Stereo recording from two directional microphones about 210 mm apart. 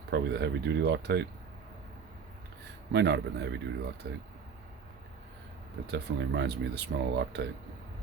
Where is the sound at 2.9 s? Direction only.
55° right (ahead or behind).